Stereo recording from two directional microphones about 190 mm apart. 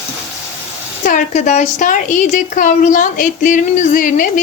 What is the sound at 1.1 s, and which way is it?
A woman's voice, 40° left (ahead or behind).